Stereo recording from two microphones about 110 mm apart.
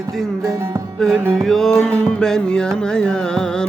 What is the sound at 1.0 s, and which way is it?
Music, 5° left (ahead or behind).